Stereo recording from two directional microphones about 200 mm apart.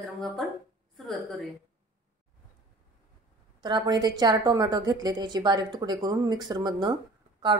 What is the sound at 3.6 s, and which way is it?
A woman's voice, 20° right (ahead or behind).